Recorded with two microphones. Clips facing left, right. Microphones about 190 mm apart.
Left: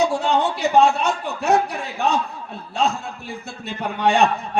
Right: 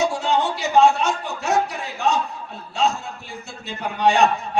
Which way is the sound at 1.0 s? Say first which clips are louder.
Left 3 dB; 60° left (ahead or behind).